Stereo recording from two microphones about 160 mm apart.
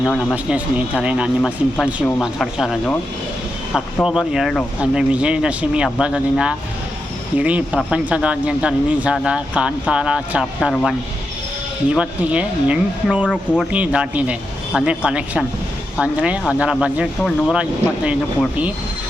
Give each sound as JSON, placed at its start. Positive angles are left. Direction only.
{"t": 0.0, "sound": "speech", "side_deg": 0}
{"t": 4.0, "sound": "speech", "side_deg": -5}
{"t": 11.9, "sound": "speech", "side_deg": -5}
{"t": 13.2, "sound": "speech", "side_deg": 10}
{"t": 13.6, "sound": "speech", "side_deg": -5}